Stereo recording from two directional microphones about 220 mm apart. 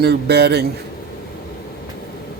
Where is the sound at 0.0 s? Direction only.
45° right (ahead or behind).